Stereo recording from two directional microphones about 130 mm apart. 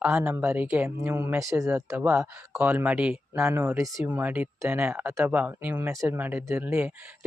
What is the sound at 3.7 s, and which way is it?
Speech, 25° right (ahead or behind).